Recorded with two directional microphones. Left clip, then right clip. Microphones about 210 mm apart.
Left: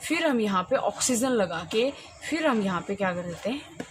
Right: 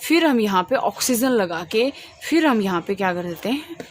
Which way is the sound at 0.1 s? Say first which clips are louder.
Right 7 dB; 50° right (ahead or behind).